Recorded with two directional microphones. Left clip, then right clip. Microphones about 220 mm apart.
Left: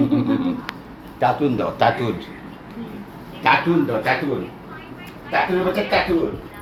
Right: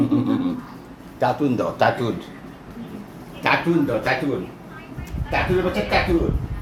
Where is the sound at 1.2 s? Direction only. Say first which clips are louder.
Left 2 dB; 15° right (ahead or behind).